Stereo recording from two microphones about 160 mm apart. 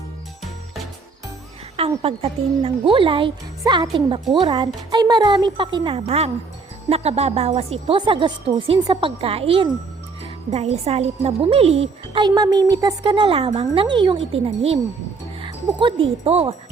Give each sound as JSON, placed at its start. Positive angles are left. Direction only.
{"t": 2.0, "sound": "speech", "side_deg": -35}